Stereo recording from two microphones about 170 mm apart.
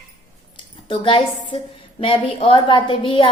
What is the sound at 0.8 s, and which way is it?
A woman's voice, 30° left (ahead or behind).